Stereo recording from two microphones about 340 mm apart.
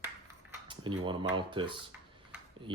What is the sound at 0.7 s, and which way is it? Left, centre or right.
Speech, centre.